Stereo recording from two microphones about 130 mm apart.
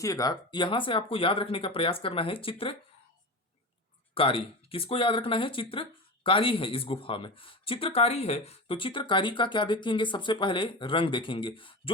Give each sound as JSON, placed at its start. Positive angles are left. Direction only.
{"t": 0.0, "sound": "speech", "side_deg": 30}
{"t": 4.1, "sound": "speech", "side_deg": 45}